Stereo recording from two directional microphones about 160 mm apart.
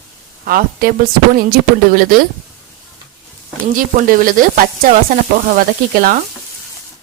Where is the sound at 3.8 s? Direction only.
60° right (ahead or behind).